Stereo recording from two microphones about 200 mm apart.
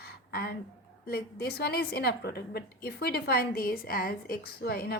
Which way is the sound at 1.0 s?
50° left (ahead or behind).